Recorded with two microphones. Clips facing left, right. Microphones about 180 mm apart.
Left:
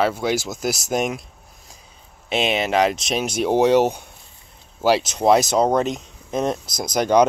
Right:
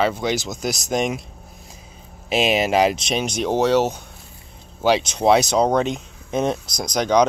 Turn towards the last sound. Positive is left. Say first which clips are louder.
# left 1 dB
turn(degrees=5)  # may be behind; listen again after turning